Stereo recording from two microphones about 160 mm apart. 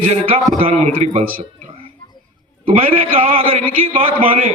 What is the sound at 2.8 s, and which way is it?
Speech, 60° right (ahead or behind).